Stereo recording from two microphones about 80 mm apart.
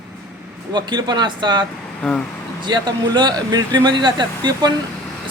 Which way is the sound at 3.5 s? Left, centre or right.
Right.